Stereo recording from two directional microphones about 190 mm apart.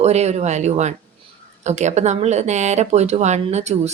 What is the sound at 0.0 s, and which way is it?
Speech, 35° right (ahead or behind).